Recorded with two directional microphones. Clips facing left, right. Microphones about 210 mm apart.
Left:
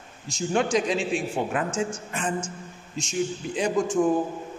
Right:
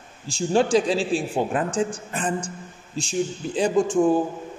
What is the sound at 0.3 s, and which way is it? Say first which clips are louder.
A man's voice: right 4 dB; 30° right (ahead or behind).